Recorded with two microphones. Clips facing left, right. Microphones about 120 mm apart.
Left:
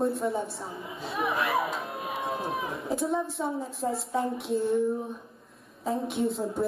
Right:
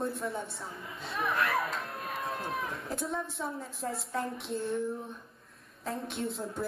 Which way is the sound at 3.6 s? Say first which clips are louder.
Left 6 dB; centre (ahead or behind).